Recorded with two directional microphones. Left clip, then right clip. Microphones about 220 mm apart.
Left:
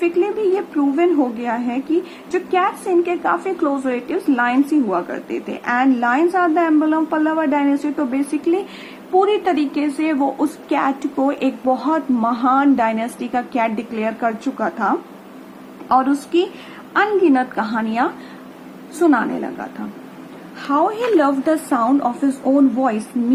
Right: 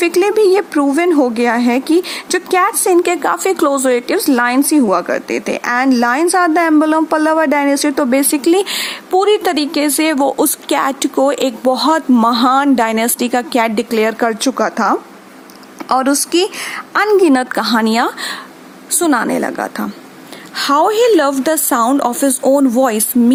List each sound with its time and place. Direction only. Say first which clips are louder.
0.0 s a woman's voice: right 7 dB; 45° right (ahead or behind)